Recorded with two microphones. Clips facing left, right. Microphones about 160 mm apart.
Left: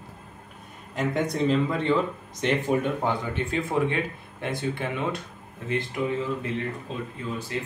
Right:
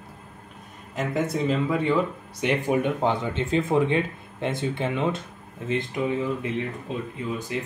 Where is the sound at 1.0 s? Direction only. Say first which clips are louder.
Even; 5° right (ahead or behind); by 6.3 s 20° right (ahead or behind).